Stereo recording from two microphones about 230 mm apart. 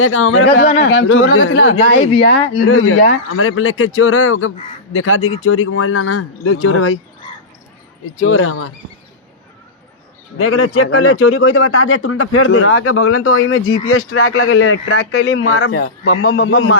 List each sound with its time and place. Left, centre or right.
0.0 s a man's voice: left
8.2 s a man's voice: left
10.3 s a man's voice: left